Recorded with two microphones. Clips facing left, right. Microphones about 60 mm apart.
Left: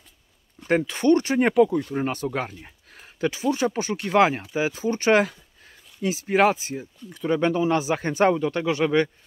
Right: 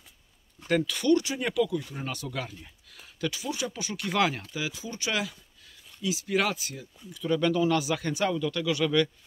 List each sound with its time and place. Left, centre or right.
0.7 s speech: left
5.3 s a sound: left
5.9 s speech: left